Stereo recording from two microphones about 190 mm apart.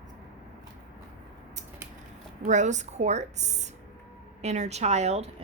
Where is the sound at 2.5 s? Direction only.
40° right (ahead or behind).